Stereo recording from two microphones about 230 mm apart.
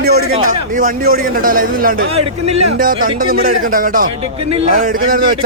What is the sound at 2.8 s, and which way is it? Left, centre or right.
A man's voice, right.